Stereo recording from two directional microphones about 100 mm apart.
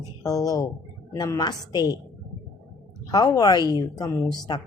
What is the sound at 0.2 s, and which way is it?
A woman's voice, 35° left (ahead or behind).